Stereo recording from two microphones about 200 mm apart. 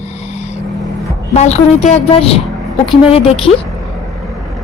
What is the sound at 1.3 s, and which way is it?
A woman's voice, 35° left (ahead or behind).